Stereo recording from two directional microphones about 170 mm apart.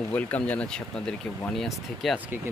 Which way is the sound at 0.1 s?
10° left (ahead or behind).